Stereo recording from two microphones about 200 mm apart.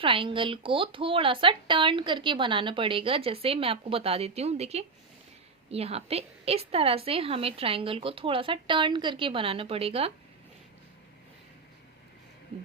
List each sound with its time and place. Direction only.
0.0 s speech: 25° right (ahead or behind)